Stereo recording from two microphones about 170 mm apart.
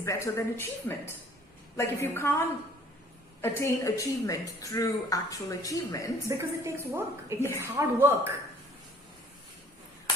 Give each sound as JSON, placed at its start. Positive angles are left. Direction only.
{"t": 0.0, "sound": "speech", "side_deg": 15}
{"t": 3.4, "sound": "a woman's voice", "side_deg": 15}
{"t": 6.2, "sound": "a woman's voice", "side_deg": -15}
{"t": 7.3, "sound": "speech", "side_deg": 15}
{"t": 7.6, "sound": "a woman's voice", "side_deg": -15}